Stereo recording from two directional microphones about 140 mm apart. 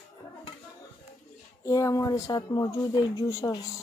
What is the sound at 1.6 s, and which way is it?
Speech, 25° left (ahead or behind).